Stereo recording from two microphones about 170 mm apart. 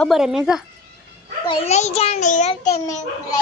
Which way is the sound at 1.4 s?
40° left (ahead or behind).